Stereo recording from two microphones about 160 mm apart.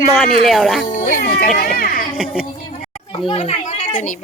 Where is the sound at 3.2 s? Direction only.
40° left (ahead or behind).